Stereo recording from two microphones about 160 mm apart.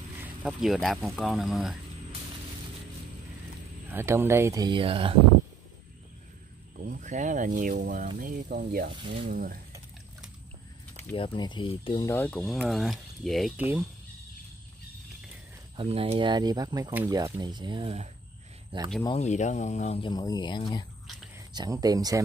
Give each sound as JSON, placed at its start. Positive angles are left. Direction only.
{"t": 0.2, "sound": "speech", "side_deg": -5}
{"t": 3.9, "sound": "speech", "side_deg": -15}
{"t": 6.8, "sound": "speech", "side_deg": -55}
{"t": 8.9, "sound": "speech", "side_deg": -30}
{"t": 9.3, "sound": "speech", "side_deg": -60}
{"t": 11.1, "sound": "speech", "side_deg": 30}
{"t": 12.1, "sound": "speech", "side_deg": 10}
{"t": 13.6, "sound": "speech", "side_deg": -10}
{"t": 15.7, "sound": "speech", "side_deg": -35}
{"t": 19.1, "sound": "speech", "side_deg": 45}
{"t": 20.0, "sound": "speech", "side_deg": 25}
{"t": 21.5, "sound": "speech", "side_deg": -25}